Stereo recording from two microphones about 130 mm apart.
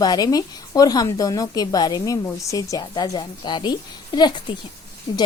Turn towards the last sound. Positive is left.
turn(degrees=35)  # may be behind; listen again after turning